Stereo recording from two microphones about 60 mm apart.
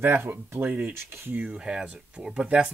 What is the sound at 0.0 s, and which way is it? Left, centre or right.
Speech, right.